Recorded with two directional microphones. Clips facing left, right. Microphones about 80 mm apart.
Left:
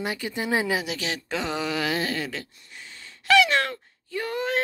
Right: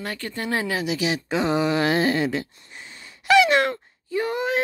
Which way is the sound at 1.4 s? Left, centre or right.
Right.